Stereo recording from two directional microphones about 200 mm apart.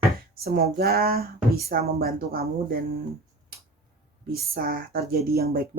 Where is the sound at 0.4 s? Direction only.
50° right (ahead or behind).